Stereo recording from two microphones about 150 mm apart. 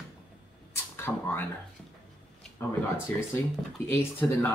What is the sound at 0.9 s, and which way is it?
Speech, 15° left (ahead or behind).